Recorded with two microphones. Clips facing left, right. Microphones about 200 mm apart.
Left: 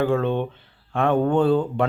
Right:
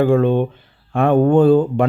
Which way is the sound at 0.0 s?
10° right (ahead or behind).